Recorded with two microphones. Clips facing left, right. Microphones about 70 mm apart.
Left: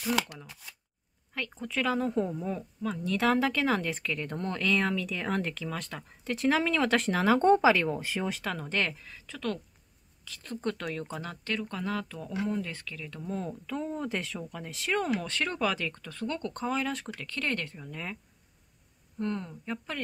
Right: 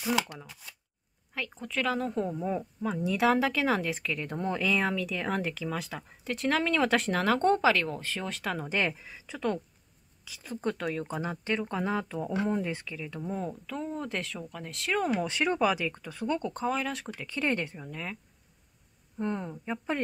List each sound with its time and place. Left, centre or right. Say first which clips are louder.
0.5 s speech: even; centre
2.4 s speech: right 2 dB; centre
8.5 s speech: right 2 dB; centre
11.2 s speech: right 4 dB; right
12.3 s speech: right 2 dB; right; by 15.1 s centre
15.1 s speech: right 4 dB; centre
17.3 s speech: right 3 dB; centre
19.1 s speech: right 1 dB; centre